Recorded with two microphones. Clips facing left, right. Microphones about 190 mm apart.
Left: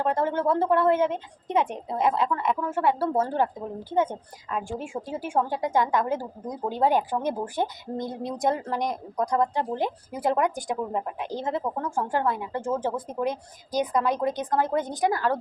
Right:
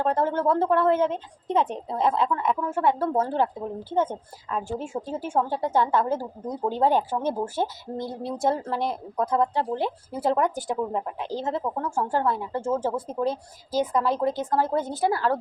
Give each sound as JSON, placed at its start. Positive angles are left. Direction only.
{"t": 0.1, "sound": "a woman's voice", "side_deg": 10}